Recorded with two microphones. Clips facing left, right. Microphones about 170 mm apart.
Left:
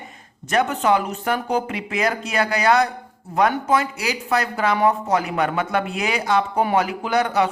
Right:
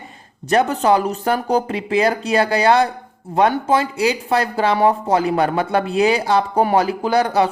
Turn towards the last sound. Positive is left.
turn(degrees=-35)  # may be behind; listen again after turning